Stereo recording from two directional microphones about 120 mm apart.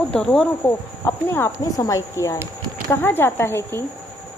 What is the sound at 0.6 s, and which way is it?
Speech, 20° left (ahead or behind).